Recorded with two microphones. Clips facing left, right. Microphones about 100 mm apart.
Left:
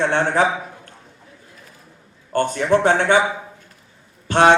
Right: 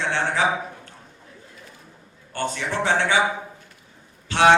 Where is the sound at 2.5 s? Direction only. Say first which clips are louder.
Left 7 dB; 50° left (ahead or behind).